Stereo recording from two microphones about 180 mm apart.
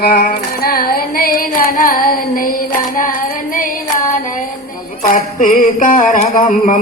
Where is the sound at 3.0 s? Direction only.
50° left (ahead or behind).